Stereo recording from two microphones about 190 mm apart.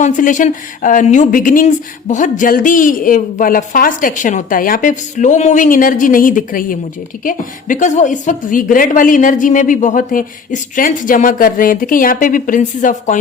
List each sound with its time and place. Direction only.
0.0 s speech: 40° left (ahead or behind)